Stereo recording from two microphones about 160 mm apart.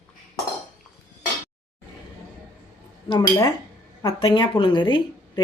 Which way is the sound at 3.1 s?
25° left (ahead or behind).